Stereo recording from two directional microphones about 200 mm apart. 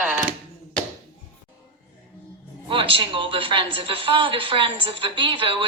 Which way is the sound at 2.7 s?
25° right (ahead or behind).